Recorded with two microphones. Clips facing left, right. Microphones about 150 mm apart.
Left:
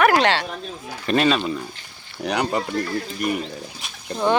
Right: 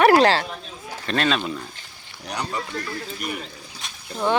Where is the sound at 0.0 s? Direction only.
35° right (ahead or behind).